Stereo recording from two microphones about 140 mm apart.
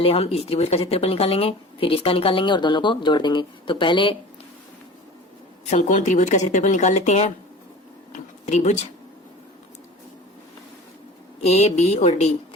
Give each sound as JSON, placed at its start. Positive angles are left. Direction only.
{"t": 0.0, "sound": "a woman's voice", "side_deg": 45}
{"t": 5.7, "sound": "speech", "side_deg": 55}
{"t": 11.4, "sound": "a sound", "side_deg": 50}